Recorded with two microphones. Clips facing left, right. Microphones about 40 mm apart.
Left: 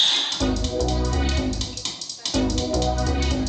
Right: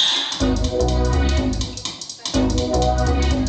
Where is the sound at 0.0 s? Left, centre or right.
Centre.